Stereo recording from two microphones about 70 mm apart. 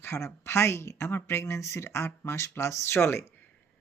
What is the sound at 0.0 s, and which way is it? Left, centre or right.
Speech, left.